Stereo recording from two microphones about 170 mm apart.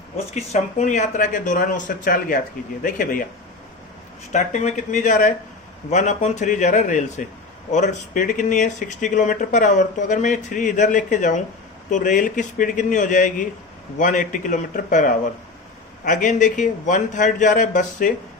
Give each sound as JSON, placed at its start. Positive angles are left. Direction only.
{"t": 0.3, "sound": "speech", "side_deg": 40}
{"t": 4.3, "sound": "speech", "side_deg": 45}